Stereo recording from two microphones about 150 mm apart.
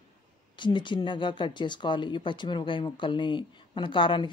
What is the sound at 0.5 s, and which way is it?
A woman's voice, 30° left (ahead or behind).